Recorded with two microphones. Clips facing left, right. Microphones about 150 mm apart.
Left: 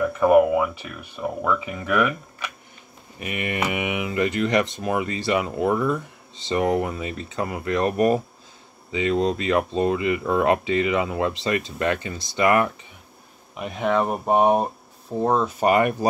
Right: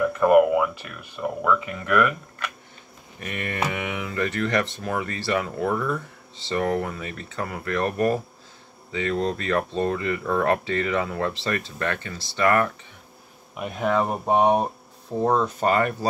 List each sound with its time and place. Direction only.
0.0 s speech: 5° left (ahead or behind)
13.6 s speech: centre (ahead or behind); by 16.1 s 15° left (ahead or behind)